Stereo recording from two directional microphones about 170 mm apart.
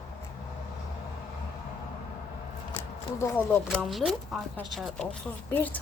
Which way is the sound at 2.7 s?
15° left (ahead or behind).